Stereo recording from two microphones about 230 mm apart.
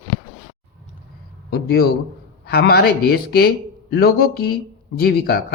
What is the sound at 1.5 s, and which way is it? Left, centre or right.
A man's voice, left.